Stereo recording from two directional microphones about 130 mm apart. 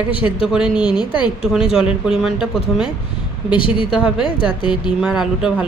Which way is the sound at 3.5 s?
40° left (ahead or behind).